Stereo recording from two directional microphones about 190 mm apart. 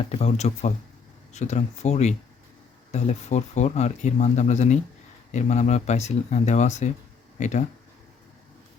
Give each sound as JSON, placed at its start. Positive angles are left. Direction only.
{"t": 0.0, "sound": "speech", "side_deg": 35}